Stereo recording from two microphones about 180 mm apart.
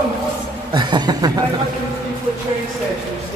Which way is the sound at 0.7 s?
25° right (ahead or behind).